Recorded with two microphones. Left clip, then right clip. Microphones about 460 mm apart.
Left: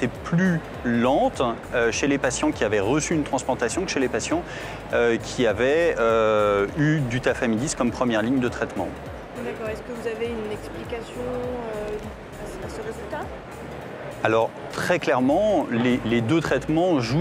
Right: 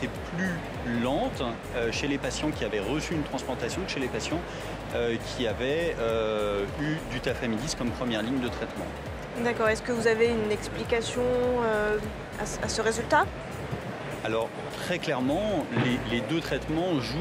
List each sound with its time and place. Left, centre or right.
0.9 s speech: left
9.7 s a woman's voice: right
14.2 s speech: left